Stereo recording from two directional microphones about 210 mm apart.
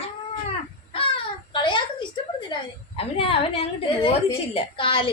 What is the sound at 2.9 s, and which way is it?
A woman's voice, 25° left (ahead or behind).